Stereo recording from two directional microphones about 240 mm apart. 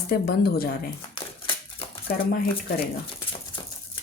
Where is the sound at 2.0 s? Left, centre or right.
Left.